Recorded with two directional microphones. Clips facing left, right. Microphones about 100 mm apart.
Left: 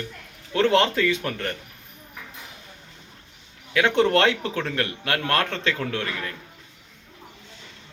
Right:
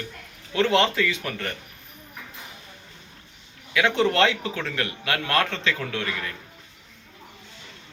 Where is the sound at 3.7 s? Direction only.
45° left (ahead or behind).